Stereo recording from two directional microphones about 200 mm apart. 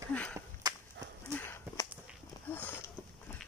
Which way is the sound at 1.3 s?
10° left (ahead or behind).